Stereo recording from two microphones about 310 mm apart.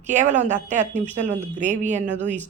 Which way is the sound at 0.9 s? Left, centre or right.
Centre.